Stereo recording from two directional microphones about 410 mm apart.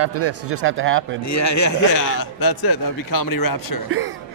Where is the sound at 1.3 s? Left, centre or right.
Left.